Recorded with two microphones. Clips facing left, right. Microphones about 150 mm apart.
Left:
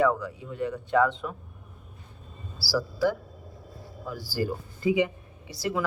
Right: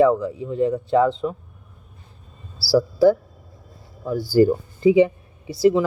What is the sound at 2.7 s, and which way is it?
Speech, 30° right (ahead or behind).